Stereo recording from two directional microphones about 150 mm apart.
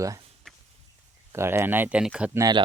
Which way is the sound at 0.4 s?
5° left (ahead or behind).